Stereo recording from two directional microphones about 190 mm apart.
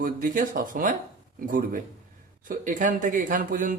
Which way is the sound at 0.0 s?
45° right (ahead or behind).